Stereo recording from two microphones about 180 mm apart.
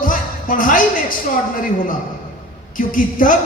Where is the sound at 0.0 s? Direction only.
50° left (ahead or behind).